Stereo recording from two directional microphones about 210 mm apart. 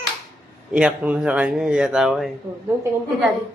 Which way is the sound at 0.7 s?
5° right (ahead or behind).